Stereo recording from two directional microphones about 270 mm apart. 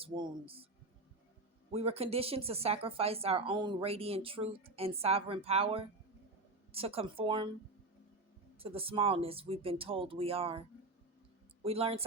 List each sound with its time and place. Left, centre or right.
0.0 s speech: centre
1.7 s speech: right
8.5 s speech: right
11.6 s speech: right